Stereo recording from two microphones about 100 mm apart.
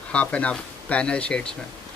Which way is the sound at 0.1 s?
10° left (ahead or behind).